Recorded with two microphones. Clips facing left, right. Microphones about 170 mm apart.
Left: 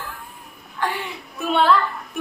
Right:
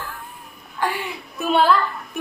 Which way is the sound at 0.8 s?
10° right (ahead or behind).